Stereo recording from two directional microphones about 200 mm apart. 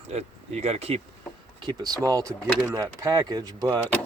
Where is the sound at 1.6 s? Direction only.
20° right (ahead or behind).